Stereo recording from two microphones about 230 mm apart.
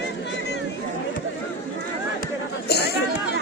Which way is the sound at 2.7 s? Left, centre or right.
Left.